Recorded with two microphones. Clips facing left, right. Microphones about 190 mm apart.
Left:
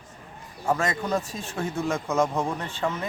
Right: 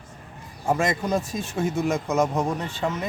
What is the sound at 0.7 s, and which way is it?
Speech, 15° right (ahead or behind).